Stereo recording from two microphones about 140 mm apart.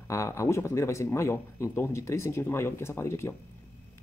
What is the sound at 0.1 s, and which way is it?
Speech, 20° left (ahead or behind).